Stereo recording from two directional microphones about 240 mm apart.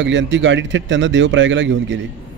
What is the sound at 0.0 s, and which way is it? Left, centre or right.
A man's voice, right.